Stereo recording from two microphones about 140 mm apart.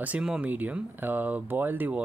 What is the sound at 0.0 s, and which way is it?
Speech, 5° right (ahead or behind).